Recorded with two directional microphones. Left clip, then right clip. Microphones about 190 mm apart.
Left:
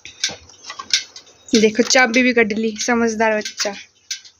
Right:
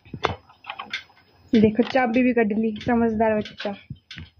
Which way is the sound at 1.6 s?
10° left (ahead or behind).